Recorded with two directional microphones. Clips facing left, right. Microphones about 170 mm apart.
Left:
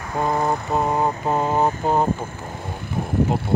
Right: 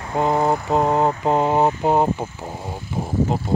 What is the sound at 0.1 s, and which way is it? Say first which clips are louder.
Mantra: right 3 dB; 20° right (ahead or behind).